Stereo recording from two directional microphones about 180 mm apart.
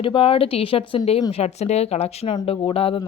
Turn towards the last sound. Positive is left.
turn(degrees=30)  # may be behind; listen again after turning